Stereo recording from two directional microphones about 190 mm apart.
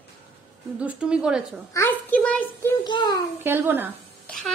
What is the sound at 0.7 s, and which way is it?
Speech, 5° right (ahead or behind).